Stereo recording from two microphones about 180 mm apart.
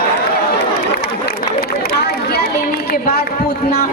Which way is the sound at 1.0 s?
55° left (ahead or behind).